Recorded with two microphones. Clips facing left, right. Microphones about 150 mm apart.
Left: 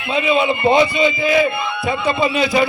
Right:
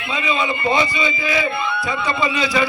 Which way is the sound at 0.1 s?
60° left (ahead or behind).